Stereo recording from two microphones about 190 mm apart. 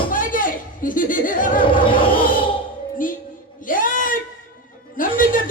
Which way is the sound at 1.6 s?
25° left (ahead or behind).